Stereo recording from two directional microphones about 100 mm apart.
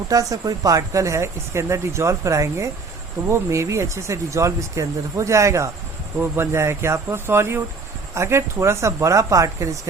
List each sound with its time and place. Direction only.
0.1 s speech: 35° right (ahead or behind)